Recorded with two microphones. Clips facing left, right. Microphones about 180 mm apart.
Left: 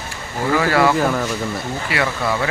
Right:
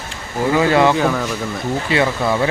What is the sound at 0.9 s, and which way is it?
Speech, 5° left (ahead or behind).